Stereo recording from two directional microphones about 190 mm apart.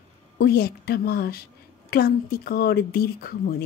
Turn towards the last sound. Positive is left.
turn(degrees=55)  # may be behind; listen again after turning